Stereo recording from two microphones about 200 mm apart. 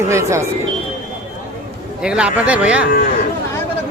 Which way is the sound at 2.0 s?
5° right (ahead or behind).